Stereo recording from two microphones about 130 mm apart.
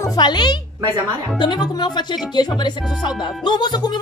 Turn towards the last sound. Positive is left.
turn(degrees=35)  # may be behind; listen again after turning